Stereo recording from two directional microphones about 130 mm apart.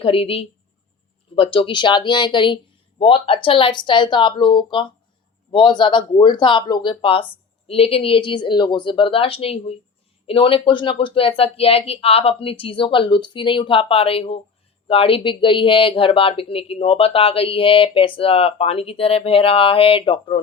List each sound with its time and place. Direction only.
0.0 s speech: 45° left (ahead or behind)